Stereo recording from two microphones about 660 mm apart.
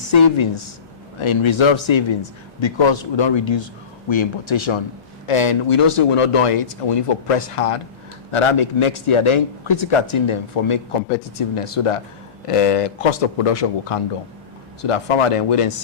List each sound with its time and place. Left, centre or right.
0.1 s speech: left